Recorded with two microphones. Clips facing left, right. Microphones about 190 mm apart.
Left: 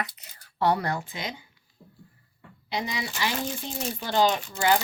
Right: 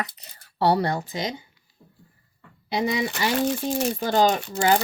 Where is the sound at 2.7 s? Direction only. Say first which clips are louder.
Right 7 dB; 60° right (ahead or behind).